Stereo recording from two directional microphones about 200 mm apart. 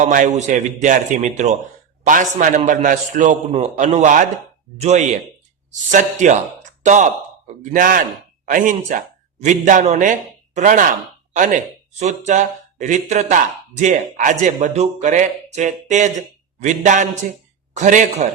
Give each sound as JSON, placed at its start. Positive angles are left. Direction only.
{"t": 0.0, "sound": "speech", "side_deg": -40}